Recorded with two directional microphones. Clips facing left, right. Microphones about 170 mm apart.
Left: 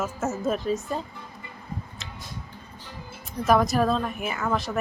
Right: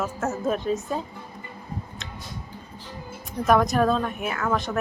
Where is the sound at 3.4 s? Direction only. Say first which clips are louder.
Right 1 dB; centre (ahead or behind).